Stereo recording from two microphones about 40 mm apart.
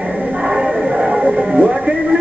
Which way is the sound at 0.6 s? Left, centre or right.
Right.